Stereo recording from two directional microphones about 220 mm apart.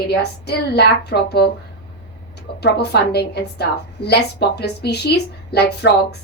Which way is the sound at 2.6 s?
45° left (ahead or behind).